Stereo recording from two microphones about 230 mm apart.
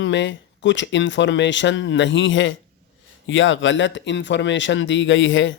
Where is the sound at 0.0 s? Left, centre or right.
Left.